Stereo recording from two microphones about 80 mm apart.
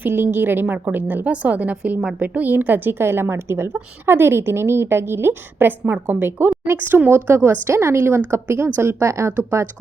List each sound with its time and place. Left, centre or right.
0.0 s a woman's voice: right